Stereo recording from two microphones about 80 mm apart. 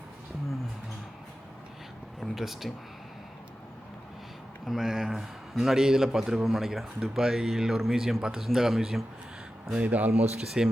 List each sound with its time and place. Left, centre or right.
2.2 s a man's voice: centre
4.6 s a man's voice: centre
9.7 s speech: centre
10.1 s speech: centre